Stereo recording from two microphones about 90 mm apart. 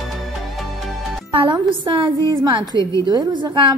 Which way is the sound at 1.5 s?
60° right (ahead or behind).